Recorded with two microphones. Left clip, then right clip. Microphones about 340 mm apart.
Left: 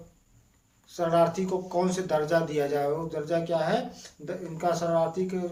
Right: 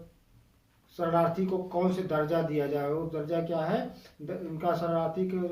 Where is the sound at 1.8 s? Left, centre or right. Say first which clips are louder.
Left 3 dB; left.